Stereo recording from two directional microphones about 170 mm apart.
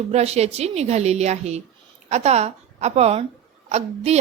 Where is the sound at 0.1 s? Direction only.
40° right (ahead or behind).